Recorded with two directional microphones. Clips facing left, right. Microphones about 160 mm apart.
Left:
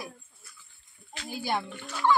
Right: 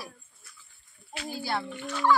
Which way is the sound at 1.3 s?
15° left (ahead or behind).